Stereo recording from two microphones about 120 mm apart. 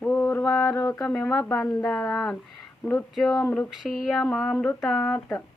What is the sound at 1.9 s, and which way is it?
Speech, 10° left (ahead or behind).